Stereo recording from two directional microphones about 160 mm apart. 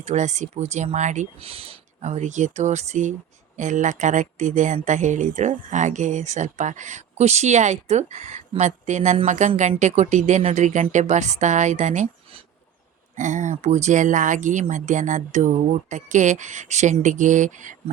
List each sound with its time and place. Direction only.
0.0 s speech: 45° right (ahead or behind)